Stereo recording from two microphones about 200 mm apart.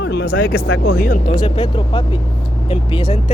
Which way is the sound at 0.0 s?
55° left (ahead or behind).